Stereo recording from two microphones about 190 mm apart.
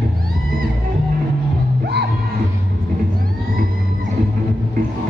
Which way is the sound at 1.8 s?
60° right (ahead or behind).